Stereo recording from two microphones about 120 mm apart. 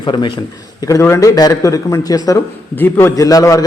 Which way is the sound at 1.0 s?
20° left (ahead or behind).